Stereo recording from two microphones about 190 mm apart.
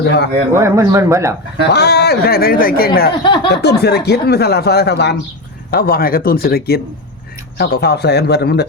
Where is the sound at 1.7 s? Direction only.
60° left (ahead or behind).